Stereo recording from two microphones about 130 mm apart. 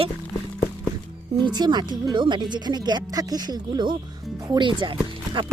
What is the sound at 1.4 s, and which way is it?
Speech, 35° right (ahead or behind).